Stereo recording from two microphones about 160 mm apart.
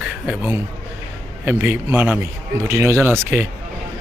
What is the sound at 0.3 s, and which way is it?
Speech, 10° right (ahead or behind).